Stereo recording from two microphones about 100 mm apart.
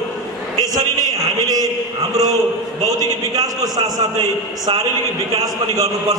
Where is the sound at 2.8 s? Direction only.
40° right (ahead or behind).